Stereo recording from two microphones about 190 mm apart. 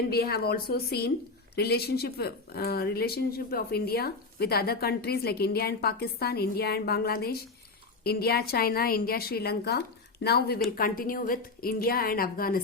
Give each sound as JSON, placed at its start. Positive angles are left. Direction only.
{"t": 0.1, "sound": "a woman's voice", "side_deg": 55}